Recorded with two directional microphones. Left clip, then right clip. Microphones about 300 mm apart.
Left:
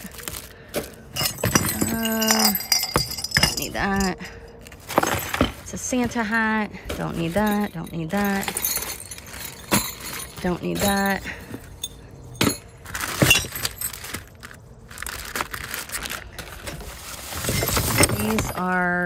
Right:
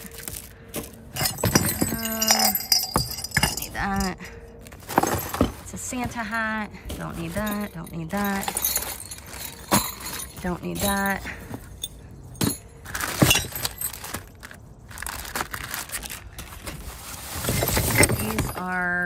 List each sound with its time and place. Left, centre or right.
0.8 s chink: centre
1.6 s a sound: centre
4.9 s keys jangling: centre
5.9 s a woman's voice: centre
7.2 s keys jangling: centre
11.0 s a woman's voice: centre
12.9 s keys jangling: centre
15.0 s a sound: centre
17.4 s clip-clop: centre
18.6 s a sound: right